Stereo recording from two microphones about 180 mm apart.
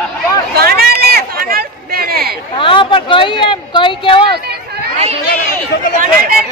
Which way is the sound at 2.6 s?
30° left (ahead or behind).